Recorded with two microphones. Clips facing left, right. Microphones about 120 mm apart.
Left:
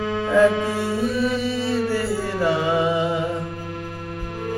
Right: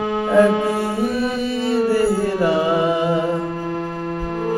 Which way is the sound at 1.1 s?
20° right (ahead or behind).